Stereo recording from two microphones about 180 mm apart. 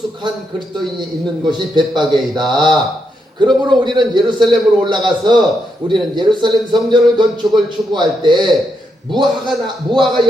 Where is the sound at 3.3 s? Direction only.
25° right (ahead or behind).